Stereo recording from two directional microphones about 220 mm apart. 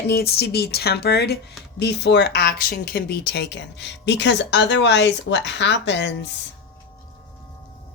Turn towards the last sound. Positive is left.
turn(degrees=50)  # may be behind; listen again after turning